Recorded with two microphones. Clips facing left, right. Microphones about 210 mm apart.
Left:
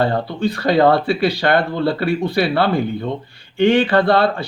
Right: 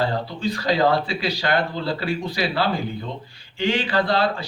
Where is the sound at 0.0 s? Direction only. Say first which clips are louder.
Left 5 dB; 60° left (ahead or behind).